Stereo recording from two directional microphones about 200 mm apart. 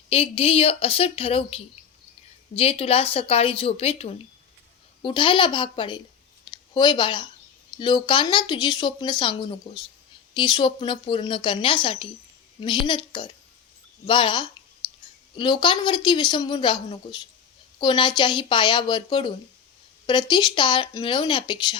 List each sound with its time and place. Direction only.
0.1 s speech: 30° left (ahead or behind)
6.4 s a sound: 20° left (ahead or behind)
7.8 s speech: 25° left (ahead or behind)